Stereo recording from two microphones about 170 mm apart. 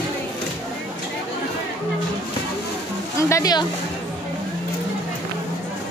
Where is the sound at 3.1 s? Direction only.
15° left (ahead or behind).